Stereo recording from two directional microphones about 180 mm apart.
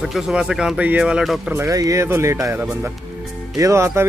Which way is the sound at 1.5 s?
15° right (ahead or behind).